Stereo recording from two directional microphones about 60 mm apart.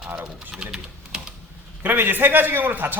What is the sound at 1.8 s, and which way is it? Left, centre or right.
A man's voice, right.